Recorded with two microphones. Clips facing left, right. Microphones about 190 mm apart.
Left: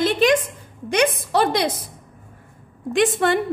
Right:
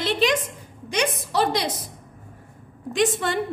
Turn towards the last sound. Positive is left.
turn(degrees=60)  # may be behind; listen again after turning